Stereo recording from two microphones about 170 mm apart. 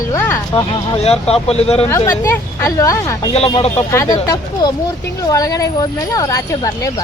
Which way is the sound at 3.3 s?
35° left (ahead or behind).